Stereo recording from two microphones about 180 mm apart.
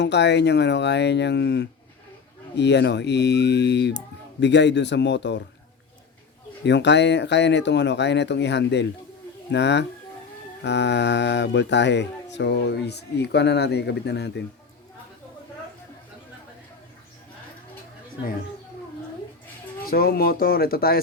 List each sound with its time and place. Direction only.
0.0 s speech: 70° left (ahead or behind)
6.7 s speech: 75° left (ahead or behind)
19.8 s speech: 55° left (ahead or behind)